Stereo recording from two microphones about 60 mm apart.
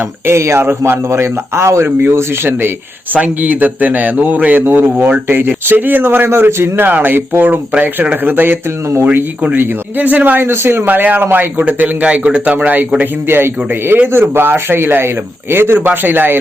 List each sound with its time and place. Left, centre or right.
0.3 s speech: right
3.2 s a man's voice: right
7.7 s a man's voice: right
10.4 s a man's voice: right
13.2 s a man's voice: right